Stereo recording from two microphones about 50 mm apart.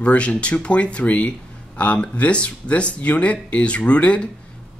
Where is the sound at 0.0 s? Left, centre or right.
Left.